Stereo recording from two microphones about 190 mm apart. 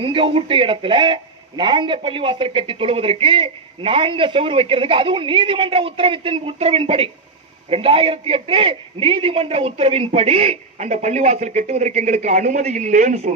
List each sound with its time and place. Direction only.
0.0 s a man's voice: 25° right (ahead or behind)